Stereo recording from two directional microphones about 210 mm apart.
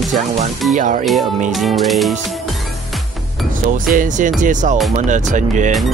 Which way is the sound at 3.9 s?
40° right (ahead or behind).